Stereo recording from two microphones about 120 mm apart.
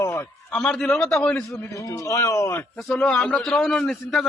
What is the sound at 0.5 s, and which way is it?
Speech, 5° left (ahead or behind).